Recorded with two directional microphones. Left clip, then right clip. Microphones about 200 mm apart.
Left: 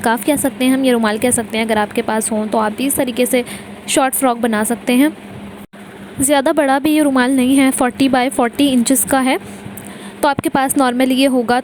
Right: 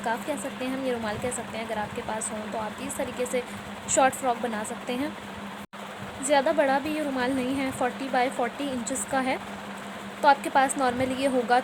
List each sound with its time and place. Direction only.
0.0 s a woman's voice: 45° left (ahead or behind)
6.2 s a woman's voice: 50° left (ahead or behind)